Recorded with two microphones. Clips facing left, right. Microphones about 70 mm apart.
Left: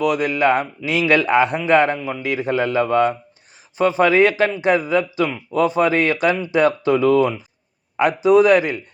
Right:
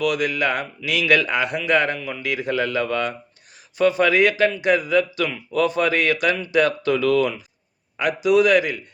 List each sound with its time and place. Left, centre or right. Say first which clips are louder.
0.0 s speech: left 4 dB; left